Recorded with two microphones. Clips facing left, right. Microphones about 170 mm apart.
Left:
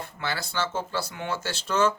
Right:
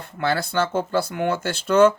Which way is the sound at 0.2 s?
55° right (ahead or behind).